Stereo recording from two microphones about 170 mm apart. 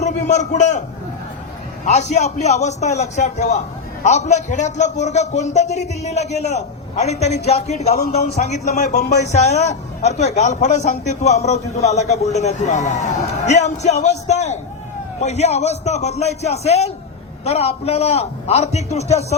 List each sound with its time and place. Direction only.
0.0 s a man's voice: 45° left (ahead or behind)
1.8 s a man's voice: 45° left (ahead or behind)
9.0 s speech: 75° left (ahead or behind)
9.3 s a man's voice: 40° left (ahead or behind)